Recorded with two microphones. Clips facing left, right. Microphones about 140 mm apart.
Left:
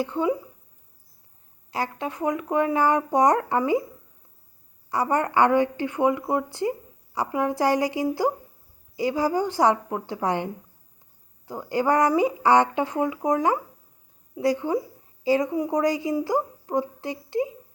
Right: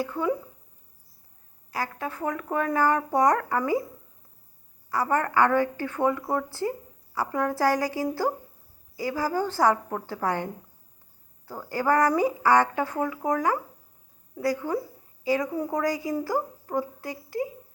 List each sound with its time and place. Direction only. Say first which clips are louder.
0.0 s a woman's voice: left 3 dB; 25° left (ahead or behind)
1.7 s a woman's voice: left 3 dB; 25° left (ahead or behind)
4.9 s a woman's voice: left 2 dB; 20° left (ahead or behind)
15.5 s a woman's voice: left 4 dB; 15° left (ahead or behind)